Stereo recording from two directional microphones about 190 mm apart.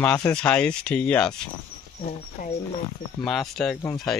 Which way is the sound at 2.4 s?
45° left (ahead or behind).